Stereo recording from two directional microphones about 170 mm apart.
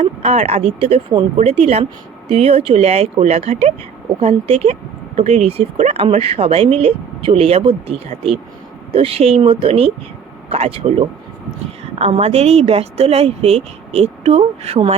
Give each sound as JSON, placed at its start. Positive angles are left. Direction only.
{"t": 0.0, "sound": "speech", "side_deg": -40}